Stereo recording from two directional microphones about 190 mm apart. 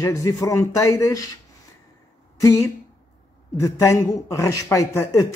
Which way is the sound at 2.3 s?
15° left (ahead or behind).